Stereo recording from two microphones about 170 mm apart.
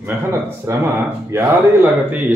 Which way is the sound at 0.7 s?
15° right (ahead or behind).